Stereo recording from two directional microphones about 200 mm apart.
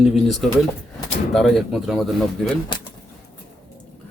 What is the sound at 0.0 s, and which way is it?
Speech, centre (ahead or behind).